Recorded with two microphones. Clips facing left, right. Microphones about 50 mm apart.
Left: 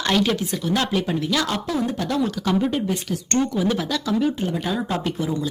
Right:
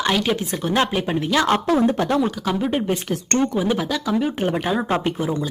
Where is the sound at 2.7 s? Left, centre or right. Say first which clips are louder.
Right 2 dB; right.